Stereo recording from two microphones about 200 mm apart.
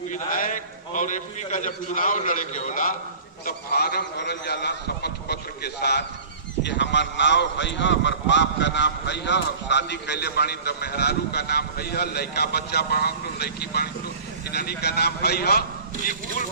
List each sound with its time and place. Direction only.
0.1 s a man's voice: 40° left (ahead or behind)